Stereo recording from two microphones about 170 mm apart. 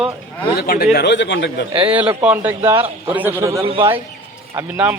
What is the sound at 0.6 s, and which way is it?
Speech, 65° left (ahead or behind).